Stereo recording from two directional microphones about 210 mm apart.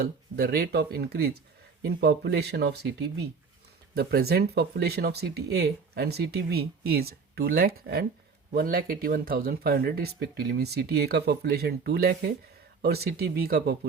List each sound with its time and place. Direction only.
0.0 s speech: 50° right (ahead or behind)